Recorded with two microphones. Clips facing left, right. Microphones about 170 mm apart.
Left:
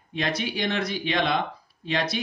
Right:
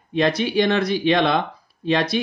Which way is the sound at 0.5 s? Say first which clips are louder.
Right 9 dB; 70° right (ahead or behind).